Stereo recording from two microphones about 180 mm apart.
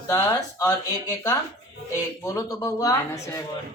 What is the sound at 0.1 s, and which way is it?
Speech, 20° left (ahead or behind).